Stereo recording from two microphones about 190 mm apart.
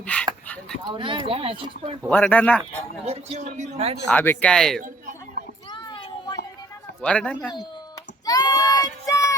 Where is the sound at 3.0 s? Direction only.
35° right (ahead or behind).